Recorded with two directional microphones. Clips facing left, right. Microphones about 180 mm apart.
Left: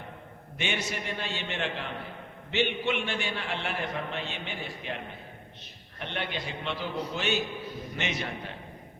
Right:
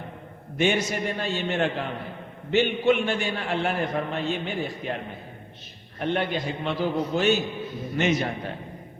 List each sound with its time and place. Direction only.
0.6 s a man's voice: 45° right (ahead or behind)
6.0 s a man's voice: 45° right (ahead or behind)